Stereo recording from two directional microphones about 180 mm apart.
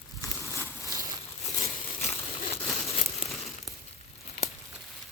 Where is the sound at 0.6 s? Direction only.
15° right (ahead or behind).